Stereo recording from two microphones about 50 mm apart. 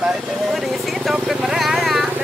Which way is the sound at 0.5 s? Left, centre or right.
Centre.